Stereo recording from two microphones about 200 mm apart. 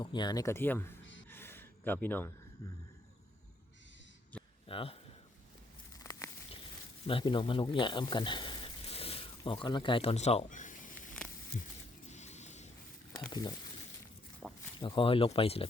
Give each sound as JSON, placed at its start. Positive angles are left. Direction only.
{"t": 0.0, "sound": "speech", "side_deg": 20}
{"t": 1.3, "sound": "gasp", "side_deg": 10}
{"t": 4.6, "sound": "speech", "side_deg": 25}
{"t": 6.0, "sound": "a sound", "side_deg": 15}
{"t": 7.1, "sound": "speech", "side_deg": 25}
{"t": 12.0, "sound": "a sound", "side_deg": 35}
{"t": 13.1, "sound": "speech", "side_deg": 20}
{"t": 14.4, "sound": "a sound", "side_deg": 5}
{"t": 14.8, "sound": "speech", "side_deg": 25}